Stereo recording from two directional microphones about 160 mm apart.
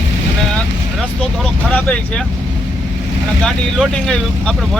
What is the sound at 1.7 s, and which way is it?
Speech, 5° left (ahead or behind).